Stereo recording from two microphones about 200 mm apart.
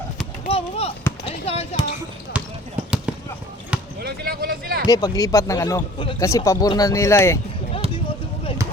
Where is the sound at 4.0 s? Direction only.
50° right (ahead or behind).